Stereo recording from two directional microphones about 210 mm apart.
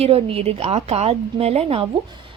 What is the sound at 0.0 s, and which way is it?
A woman's voice, 25° right (ahead or behind).